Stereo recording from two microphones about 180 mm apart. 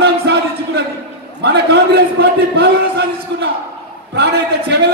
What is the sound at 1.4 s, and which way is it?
A man's voice, 65° right (ahead or behind).